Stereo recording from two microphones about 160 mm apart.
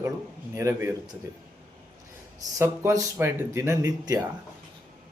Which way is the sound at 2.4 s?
20° right (ahead or behind).